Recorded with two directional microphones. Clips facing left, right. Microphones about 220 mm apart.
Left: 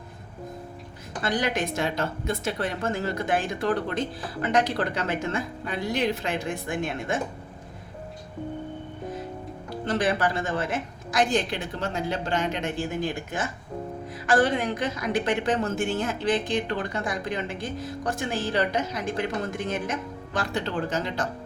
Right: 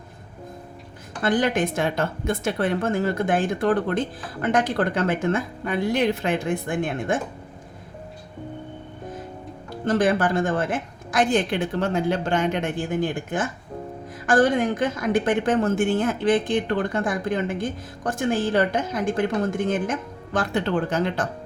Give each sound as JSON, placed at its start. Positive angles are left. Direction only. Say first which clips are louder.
{"t": 1.2, "sound": "a woman's voice", "louder": "right 5 dB", "side_deg": -50}
{"t": 9.8, "sound": "a woman's voice", "louder": "right 5 dB", "side_deg": -45}